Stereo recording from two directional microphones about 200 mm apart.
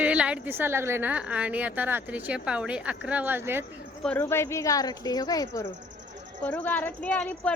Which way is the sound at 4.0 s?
5° left (ahead or behind).